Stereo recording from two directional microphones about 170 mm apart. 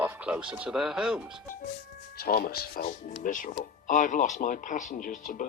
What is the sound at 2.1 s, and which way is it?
Speech, 60° left (ahead or behind).